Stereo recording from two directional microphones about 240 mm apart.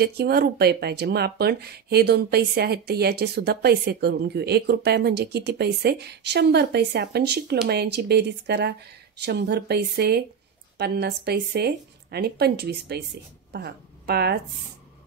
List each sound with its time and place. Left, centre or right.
0.0 s a woman's voice: right